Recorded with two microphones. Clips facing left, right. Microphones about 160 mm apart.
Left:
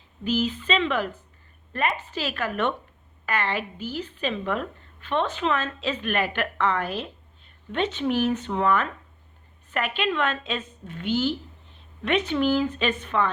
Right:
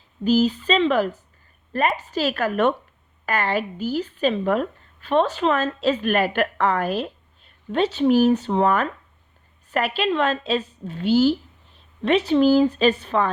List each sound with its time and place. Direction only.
0.3 s a woman's voice: 40° right (ahead or behind)